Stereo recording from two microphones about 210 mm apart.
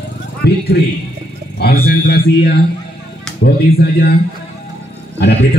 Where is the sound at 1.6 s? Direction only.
45° left (ahead or behind).